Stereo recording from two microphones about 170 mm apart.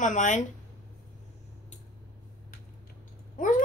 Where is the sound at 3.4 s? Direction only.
50° left (ahead or behind).